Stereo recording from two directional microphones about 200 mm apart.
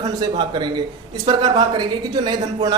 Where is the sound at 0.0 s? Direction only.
20° right (ahead or behind).